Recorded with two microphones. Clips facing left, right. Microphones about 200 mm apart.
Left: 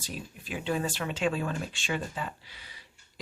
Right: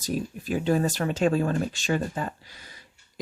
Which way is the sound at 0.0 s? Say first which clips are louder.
Right 11 dB; 40° right (ahead or behind).